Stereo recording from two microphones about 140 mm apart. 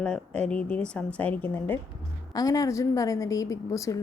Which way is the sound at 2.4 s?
25° left (ahead or behind).